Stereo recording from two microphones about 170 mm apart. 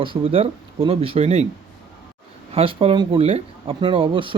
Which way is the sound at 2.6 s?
35° right (ahead or behind).